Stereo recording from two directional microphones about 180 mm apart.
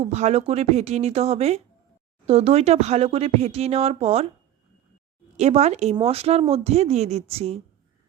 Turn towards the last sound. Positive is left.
turn(degrees=-35)  # may be behind; listen again after turning